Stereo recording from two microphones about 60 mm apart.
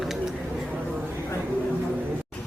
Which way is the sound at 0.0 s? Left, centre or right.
Centre.